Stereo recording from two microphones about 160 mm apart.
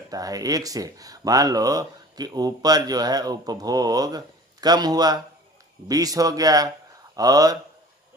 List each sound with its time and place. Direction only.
0.1 s speech: 20° right (ahead or behind)